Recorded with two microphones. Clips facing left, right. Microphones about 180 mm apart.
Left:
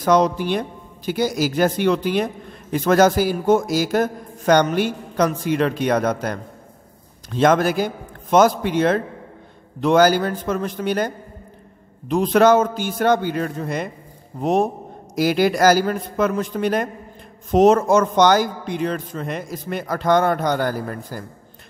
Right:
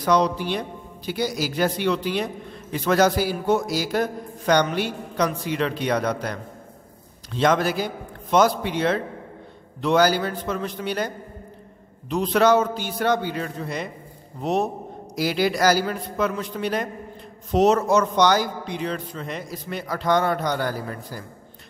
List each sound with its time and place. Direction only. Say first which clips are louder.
0.0 s a man's voice: left 4 dB; 50° left (ahead or behind)
12.1 s a man's voice: left 4 dB; 50° left (ahead or behind)